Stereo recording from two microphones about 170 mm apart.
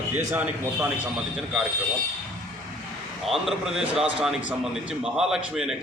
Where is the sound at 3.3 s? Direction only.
Centre (ahead or behind).